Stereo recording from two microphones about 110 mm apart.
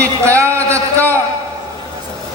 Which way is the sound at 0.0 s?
25° right (ahead or behind).